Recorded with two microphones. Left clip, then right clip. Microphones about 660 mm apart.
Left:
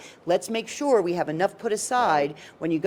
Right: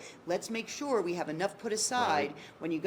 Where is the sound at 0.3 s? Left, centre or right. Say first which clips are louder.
Left 10 dB; left.